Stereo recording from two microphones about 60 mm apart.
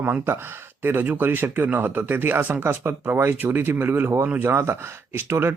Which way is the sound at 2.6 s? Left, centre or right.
Right.